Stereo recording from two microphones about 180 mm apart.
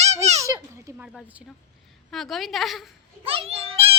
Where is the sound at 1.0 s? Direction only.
5° right (ahead or behind).